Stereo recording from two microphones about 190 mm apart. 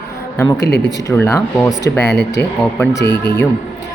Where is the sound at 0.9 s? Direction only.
15° left (ahead or behind).